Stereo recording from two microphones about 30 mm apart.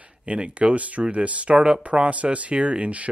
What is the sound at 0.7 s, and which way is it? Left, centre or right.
Speech, right.